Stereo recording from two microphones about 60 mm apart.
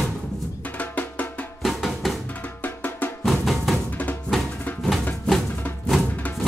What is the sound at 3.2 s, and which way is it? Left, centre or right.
Music, centre.